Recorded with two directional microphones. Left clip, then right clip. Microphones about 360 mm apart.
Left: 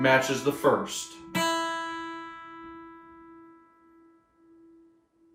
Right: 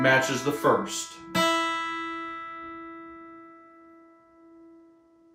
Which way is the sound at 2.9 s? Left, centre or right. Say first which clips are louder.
Right 6 dB; right.